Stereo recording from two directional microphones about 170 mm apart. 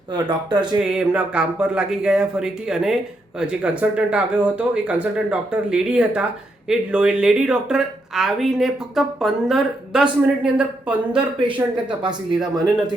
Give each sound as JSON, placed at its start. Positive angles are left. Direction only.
{"t": 0.1, "sound": "speech", "side_deg": -25}
{"t": 0.9, "sound": "speech", "side_deg": -5}
{"t": 12.0, "sound": "speech", "side_deg": -25}